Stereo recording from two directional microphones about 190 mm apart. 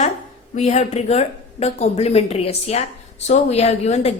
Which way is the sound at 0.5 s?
35° left (ahead or behind).